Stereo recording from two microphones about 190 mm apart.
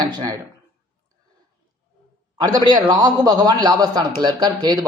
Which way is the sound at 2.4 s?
20° right (ahead or behind).